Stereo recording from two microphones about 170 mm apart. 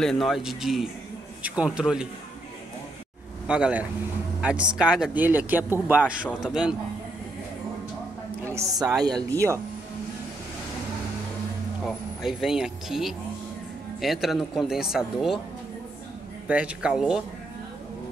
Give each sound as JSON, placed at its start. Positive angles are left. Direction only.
{"t": 0.0, "sound": "speech", "side_deg": 0}
{"t": 3.4, "sound": "speech", "side_deg": -5}
{"t": 8.5, "sound": "a woman's voice", "side_deg": -20}
{"t": 11.8, "sound": "speech", "side_deg": 0}
{"t": 16.4, "sound": "speech", "side_deg": -5}